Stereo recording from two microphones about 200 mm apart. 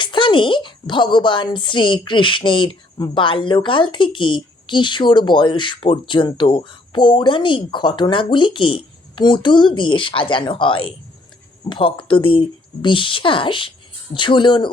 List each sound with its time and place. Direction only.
0.0 s speech: 25° left (ahead or behind)